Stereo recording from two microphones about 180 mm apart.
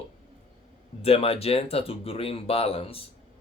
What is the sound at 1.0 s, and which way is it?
Speech, 35° left (ahead or behind).